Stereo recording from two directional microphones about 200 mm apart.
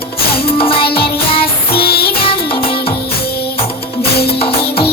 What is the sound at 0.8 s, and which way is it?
Music, 50° left (ahead or behind).